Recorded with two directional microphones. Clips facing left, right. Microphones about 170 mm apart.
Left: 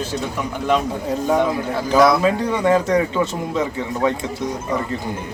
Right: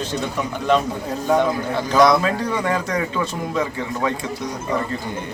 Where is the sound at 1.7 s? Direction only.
5° left (ahead or behind).